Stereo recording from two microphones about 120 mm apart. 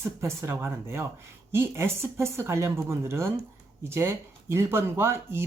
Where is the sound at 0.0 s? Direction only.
20° right (ahead or behind).